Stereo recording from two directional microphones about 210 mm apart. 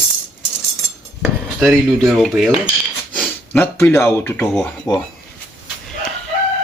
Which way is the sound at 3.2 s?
5° left (ahead or behind).